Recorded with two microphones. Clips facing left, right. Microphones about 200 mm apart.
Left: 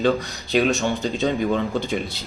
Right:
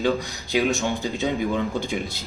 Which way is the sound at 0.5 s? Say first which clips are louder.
Left 3 dB; 65° left (ahead or behind).